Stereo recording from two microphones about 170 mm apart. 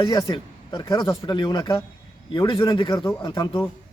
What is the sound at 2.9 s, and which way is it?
Speech, 15° left (ahead or behind).